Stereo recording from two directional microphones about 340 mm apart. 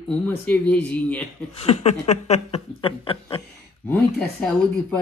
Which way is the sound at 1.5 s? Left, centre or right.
Centre.